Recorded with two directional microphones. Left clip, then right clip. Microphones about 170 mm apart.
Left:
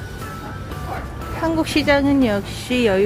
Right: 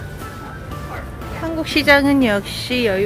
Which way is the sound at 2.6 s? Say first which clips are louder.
Left 1 dB; 20° left (ahead or behind).